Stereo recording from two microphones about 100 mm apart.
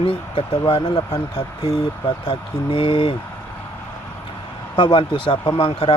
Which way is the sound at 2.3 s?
65° left (ahead or behind).